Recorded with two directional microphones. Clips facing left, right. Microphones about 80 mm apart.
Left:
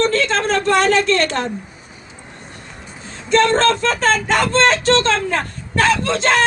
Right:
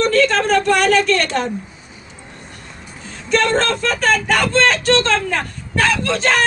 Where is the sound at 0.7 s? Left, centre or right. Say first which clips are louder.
Even; left.